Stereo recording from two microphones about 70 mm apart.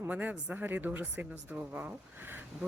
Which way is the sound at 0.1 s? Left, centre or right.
Right.